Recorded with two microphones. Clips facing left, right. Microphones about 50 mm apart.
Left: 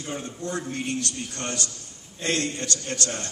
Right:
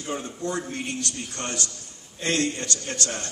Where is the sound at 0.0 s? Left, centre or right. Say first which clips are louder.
Right 2 dB; right.